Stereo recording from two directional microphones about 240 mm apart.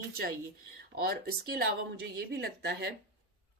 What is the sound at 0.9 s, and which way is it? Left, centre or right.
A woman's voice, right.